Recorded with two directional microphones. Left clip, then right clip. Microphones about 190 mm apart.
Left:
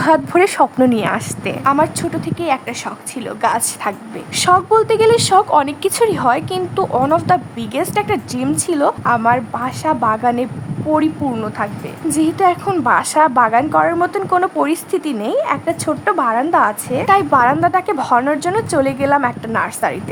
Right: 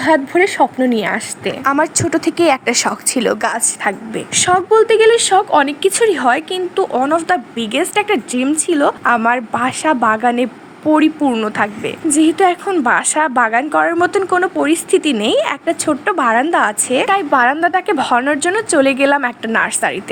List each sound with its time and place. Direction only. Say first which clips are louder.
0.0 s a woman's voice: even; 10° left (ahead or behind)
1.6 s a woman's voice: even; 25° right (ahead or behind)
3.4 s a woman's voice: even; 10° right (ahead or behind)
4.7 s speech: right 2 dB; 5° left (ahead or behind)
9.0 s a woman's voice: right 1 dB; 10° right (ahead or behind)
11.4 s a woman's voice: right 4 dB; 20° right (ahead or behind)
12.2 s a woman's voice: right 1 dB; centre (ahead or behind)